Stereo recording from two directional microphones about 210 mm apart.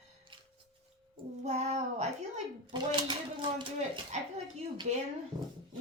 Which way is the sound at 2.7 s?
20° right (ahead or behind).